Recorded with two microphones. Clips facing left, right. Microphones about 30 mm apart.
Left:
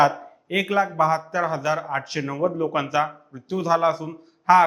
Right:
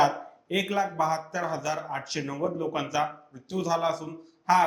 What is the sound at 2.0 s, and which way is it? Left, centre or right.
A man's voice, centre.